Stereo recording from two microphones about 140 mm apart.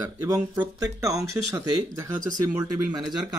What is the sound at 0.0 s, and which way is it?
Speech, 25° right (ahead or behind).